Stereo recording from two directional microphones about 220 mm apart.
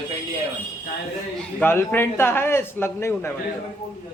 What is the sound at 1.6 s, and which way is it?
A man's voice, 10° left (ahead or behind).